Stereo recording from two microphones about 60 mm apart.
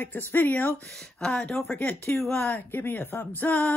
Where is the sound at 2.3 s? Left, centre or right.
Left.